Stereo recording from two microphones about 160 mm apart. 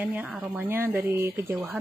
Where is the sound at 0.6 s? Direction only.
15° right (ahead or behind).